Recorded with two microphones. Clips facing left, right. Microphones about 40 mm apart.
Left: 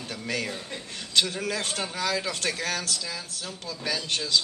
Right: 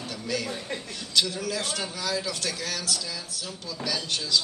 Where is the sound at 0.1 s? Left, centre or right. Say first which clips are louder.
Even; left.